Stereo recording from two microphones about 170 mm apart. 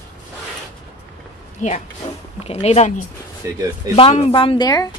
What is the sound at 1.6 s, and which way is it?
A woman's voice, 50° left (ahead or behind).